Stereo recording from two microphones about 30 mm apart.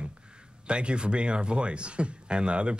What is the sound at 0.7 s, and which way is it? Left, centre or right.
Speech, right.